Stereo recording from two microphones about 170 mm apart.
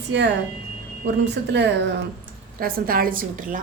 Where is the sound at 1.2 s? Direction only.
90° right.